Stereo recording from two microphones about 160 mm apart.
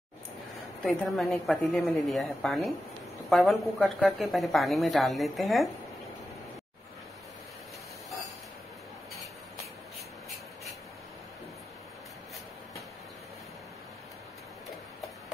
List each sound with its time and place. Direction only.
0.8 s a woman's voice: centre (ahead or behind)